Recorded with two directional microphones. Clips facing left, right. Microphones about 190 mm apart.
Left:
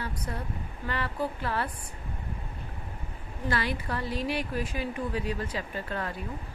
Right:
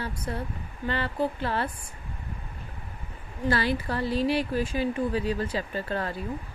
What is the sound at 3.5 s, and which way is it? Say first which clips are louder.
A woman's voice: right 4 dB; 30° right (ahead or behind).